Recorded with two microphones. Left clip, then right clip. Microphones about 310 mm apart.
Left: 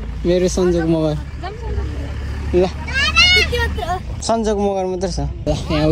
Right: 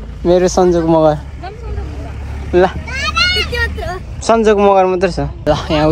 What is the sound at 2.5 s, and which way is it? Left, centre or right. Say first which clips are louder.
Vehicle: right 4 dB; centre.